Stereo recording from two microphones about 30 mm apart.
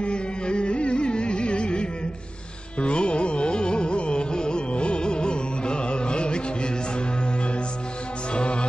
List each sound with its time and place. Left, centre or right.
0.0 s music: left
2.8 s carnatic music: left
8.4 s music: left